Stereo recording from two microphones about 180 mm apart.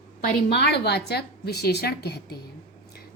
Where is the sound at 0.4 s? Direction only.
70° left (ahead or behind).